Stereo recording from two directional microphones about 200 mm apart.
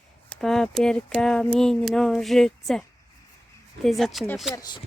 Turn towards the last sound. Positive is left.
turn(degrees=20)  # may be behind; listen again after turning